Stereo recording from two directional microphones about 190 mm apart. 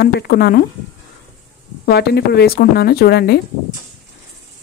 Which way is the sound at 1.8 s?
60° left (ahead or behind).